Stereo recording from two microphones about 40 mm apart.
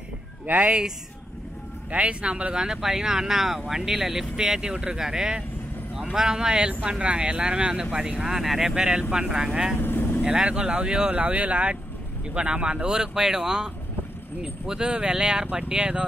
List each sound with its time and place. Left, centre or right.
0.6 s speech: right
1.9 s speech: right
2.5 s speech: centre
7.5 s speech: centre
8.7 s speech: right
9.8 s vehicle: left
10.2 s speech: right
11.1 s speech: right